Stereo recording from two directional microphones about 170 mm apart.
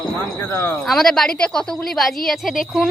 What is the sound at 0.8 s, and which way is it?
Speech, centre (ahead or behind).